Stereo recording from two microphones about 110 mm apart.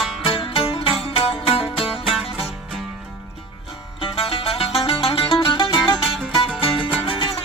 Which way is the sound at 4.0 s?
60° left (ahead or behind).